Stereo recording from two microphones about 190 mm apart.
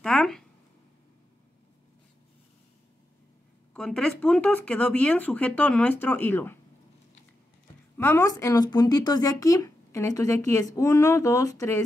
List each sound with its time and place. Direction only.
0.0 s a sound: 5° left (ahead or behind)
3.7 s speech: 5° left (ahead or behind)
8.0 s speech: 15° left (ahead or behind)